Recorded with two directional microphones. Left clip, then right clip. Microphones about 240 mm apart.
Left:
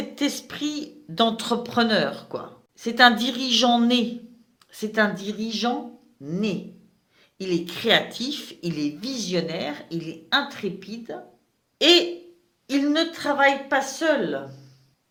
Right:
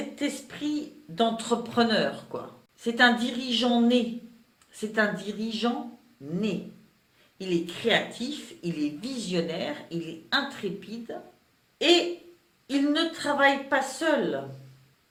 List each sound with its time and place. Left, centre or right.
0.2 s speech: left
7.3 s speech: left